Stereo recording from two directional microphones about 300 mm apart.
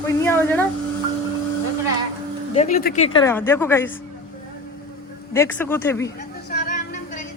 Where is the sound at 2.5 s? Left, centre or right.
Left.